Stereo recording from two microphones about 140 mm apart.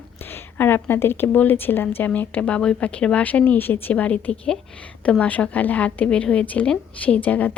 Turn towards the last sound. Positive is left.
turn(degrees=10)  # may be behind; listen again after turning